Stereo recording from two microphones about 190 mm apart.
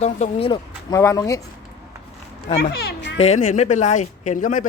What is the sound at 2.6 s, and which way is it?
Children playing, 55° left (ahead or behind).